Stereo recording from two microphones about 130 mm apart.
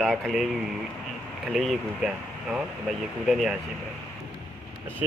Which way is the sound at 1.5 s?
Centre (ahead or behind).